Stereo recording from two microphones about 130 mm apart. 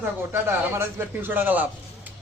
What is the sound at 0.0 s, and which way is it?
Speech, 20° right (ahead or behind).